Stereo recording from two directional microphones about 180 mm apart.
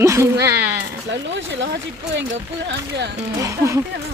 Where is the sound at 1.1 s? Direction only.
85° right.